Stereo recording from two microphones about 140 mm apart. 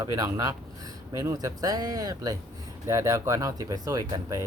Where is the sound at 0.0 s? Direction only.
25° right (ahead or behind).